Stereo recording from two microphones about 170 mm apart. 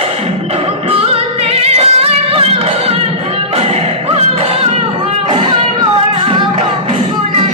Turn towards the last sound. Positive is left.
turn(degrees=-30)  # may be behind; listen again after turning